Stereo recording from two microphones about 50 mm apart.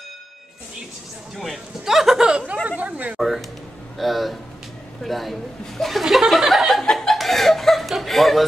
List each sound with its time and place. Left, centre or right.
1.3 s speech: centre
2.2 s a sound: centre
3.2 s speech: centre
6.7 s chuckle: centre